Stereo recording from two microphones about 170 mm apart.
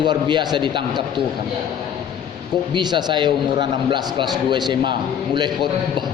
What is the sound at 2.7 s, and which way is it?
A man's voice, 25° right (ahead or behind).